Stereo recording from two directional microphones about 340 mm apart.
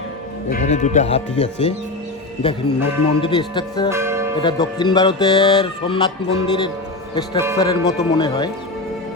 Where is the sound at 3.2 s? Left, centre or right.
Centre.